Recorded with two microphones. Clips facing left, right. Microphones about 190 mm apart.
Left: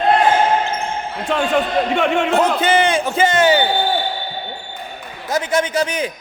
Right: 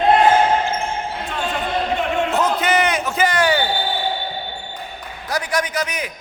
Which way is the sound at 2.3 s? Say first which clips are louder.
Left 2 dB; 30° left (ahead or behind).